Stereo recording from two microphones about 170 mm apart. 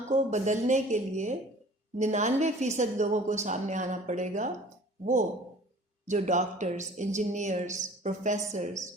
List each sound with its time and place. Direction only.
0.1 s a woman's voice: 45° right (ahead or behind)
6.1 s a woman's voice: 45° right (ahead or behind)